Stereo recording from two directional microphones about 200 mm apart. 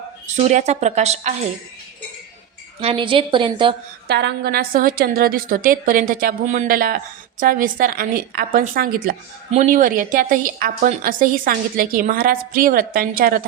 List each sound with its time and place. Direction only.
0.3 s a woman's voice: 35° right (ahead or behind)
2.8 s a woman's voice: 25° right (ahead or behind)
4.1 s a woman's voice: 55° right (ahead or behind)